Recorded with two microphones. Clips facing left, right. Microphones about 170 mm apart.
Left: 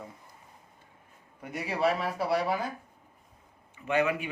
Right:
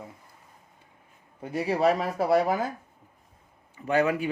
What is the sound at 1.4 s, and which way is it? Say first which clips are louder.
Speech: right 5 dB; 30° right (ahead or behind).